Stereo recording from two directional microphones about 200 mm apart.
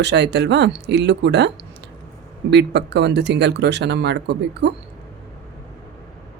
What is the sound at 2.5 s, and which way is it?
Speech, 60° right (ahead or behind).